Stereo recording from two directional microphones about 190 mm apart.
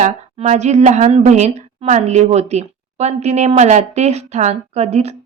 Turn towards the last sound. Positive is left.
turn(degrees=-35)  # may be behind; listen again after turning